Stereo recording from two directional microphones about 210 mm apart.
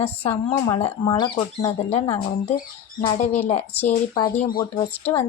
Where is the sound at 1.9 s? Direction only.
30° left (ahead or behind).